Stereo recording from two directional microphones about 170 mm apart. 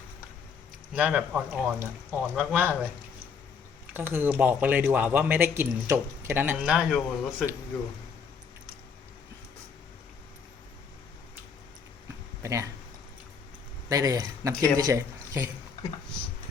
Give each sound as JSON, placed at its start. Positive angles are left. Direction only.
{"t": 0.9, "sound": "speech", "side_deg": -10}
{"t": 3.9, "sound": "speech", "side_deg": -10}
{"t": 12.4, "sound": "speech", "side_deg": -20}
{"t": 13.9, "sound": "speech", "side_deg": -20}